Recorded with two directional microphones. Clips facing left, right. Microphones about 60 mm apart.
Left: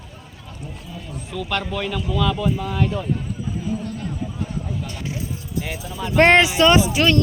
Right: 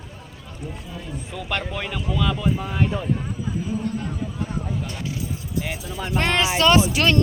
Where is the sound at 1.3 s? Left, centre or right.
Centre.